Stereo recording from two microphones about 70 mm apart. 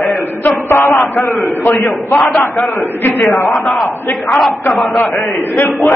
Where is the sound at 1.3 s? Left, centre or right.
Left.